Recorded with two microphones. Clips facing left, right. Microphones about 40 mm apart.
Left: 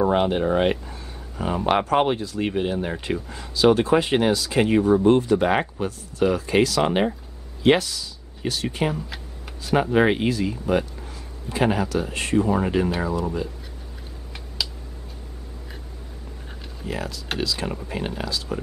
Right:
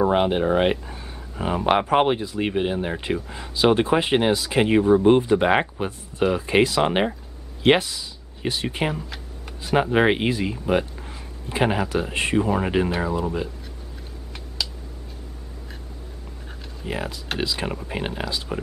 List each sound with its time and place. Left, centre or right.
0.0 s speech: centre
14.6 s a sound: centre
16.8 s speech: right